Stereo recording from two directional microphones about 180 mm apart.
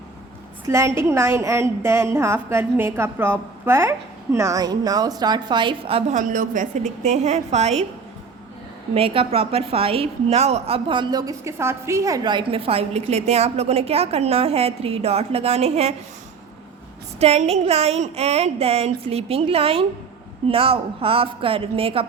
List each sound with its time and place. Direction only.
0.7 s a woman's voice: 15° right (ahead or behind)
6.1 s a woman's voice: 45° right (ahead or behind)
9.0 s a woman's voice: 30° right (ahead or behind)
17.2 s a woman's voice: 35° right (ahead or behind)